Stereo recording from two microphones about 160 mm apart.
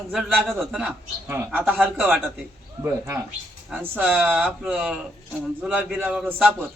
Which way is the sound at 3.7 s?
10° right (ahead or behind).